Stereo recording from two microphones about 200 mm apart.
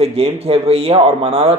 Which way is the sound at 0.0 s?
30° right (ahead or behind).